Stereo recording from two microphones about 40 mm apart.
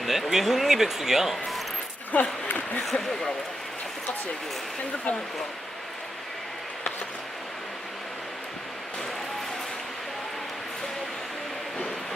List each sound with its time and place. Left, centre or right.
0.0 s speech: centre
2.1 s speech: left
2.8 s speech: centre